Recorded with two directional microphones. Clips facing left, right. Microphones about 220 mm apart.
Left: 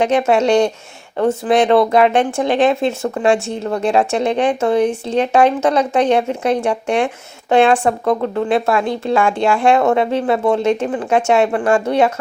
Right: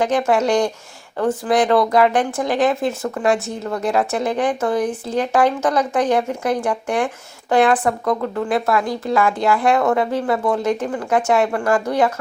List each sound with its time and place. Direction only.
0.0 s speech: 25° left (ahead or behind)